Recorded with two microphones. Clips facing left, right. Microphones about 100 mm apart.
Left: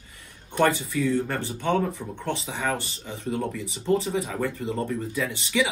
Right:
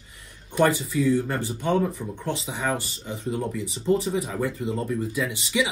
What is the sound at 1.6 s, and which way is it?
Speech, 15° right (ahead or behind).